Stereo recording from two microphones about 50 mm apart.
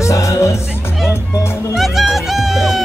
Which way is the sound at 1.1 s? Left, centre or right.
Left.